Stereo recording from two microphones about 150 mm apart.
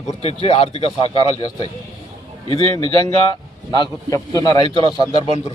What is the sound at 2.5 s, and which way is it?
Speech, 40° right (ahead or behind).